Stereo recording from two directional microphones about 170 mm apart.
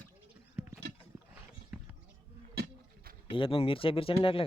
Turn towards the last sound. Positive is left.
turn(degrees=35)  # may be behind; listen again after turning